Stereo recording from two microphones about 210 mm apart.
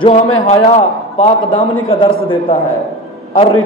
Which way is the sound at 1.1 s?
25° left (ahead or behind).